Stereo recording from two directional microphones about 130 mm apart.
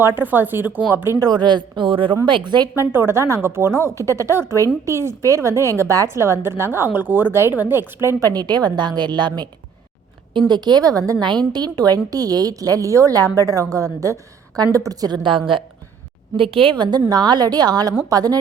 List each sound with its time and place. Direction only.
0.0 s speech: 15° right (ahead or behind)
1.2 s a woman's voice: 35° right (ahead or behind)
2.9 s a woman's voice: 20° right (ahead or behind)
8.0 s a woman's voice: 30° right (ahead or behind)
10.5 s a woman's voice: 30° right (ahead or behind)